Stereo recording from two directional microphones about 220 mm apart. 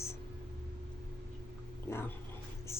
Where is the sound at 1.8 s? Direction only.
10° left (ahead or behind).